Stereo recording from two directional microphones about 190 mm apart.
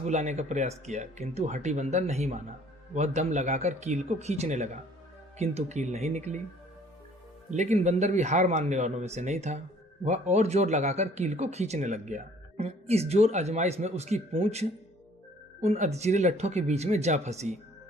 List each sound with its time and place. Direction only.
0.0 s speech: 35° right (ahead or behind)
7.5 s speech: 40° right (ahead or behind)